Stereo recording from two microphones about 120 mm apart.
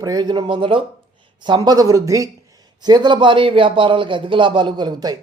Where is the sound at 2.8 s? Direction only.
40° right (ahead or behind).